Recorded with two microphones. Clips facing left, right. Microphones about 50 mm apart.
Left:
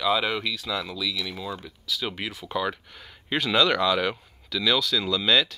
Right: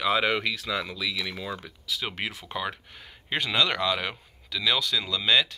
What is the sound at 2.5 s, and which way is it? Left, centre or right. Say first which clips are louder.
Speech: left 4 dB; centre.